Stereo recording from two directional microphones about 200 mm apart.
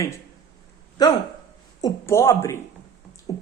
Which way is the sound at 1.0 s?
20° left (ahead or behind).